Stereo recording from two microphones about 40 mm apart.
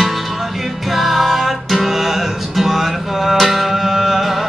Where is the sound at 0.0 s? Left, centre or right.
Centre.